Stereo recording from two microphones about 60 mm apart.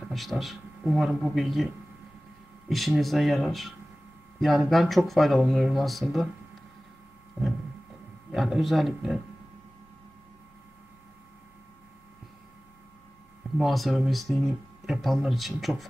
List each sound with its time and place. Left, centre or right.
0.1 s speech: centre
2.7 s speech: centre
7.4 s a sound: centre
8.4 s speech: centre
13.6 s speech: centre